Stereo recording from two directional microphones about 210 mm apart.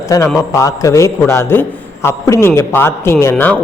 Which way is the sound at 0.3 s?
15° left (ahead or behind).